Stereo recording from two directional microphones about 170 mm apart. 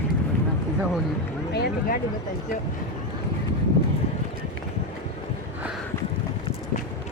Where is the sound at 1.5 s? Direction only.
70° left (ahead or behind).